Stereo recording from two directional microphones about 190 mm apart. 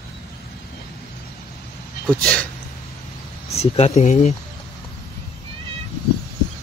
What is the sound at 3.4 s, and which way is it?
Speech, 35° left (ahead or behind).